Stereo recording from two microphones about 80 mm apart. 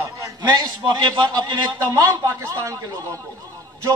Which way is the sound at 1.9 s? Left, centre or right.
Right.